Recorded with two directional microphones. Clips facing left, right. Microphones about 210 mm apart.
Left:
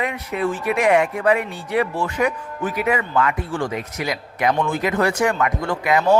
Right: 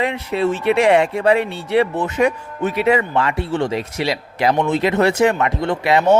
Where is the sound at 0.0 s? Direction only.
30° right (ahead or behind).